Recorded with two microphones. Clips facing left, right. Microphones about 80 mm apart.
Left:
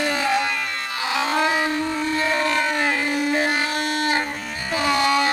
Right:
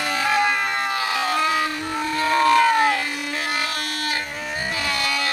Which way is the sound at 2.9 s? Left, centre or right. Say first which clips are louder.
Left 5 dB; left.